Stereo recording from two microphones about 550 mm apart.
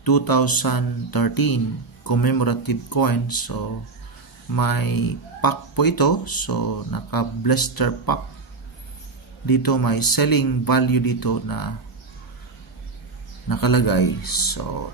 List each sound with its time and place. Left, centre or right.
0.0 s a man's voice: left
9.5 s a man's voice: left
13.5 s a man's voice: left